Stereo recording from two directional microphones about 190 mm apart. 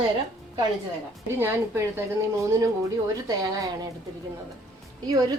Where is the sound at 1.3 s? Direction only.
10° right (ahead or behind).